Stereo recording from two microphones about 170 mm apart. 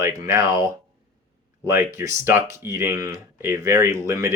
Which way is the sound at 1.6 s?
15° right (ahead or behind).